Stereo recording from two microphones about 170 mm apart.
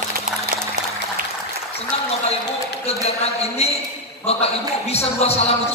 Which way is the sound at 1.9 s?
35° left (ahead or behind).